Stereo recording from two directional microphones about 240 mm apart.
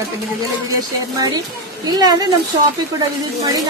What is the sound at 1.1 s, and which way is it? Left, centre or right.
A woman's voice, centre.